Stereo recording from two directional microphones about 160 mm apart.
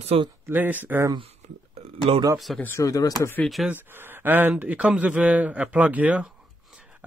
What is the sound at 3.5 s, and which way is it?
Speech, centre (ahead or behind).